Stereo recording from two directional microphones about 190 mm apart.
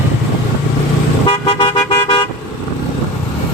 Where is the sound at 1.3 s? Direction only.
30° left (ahead or behind).